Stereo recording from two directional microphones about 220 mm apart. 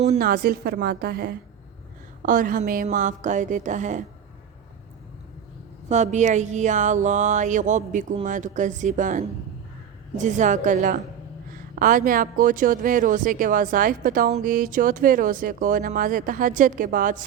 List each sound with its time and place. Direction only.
0.2 s a woman's voice: 45° right (ahead or behind)
5.9 s speech: 30° right (ahead or behind)